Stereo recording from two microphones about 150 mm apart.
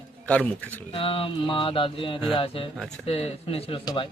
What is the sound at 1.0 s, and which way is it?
A man's voice, 35° left (ahead or behind).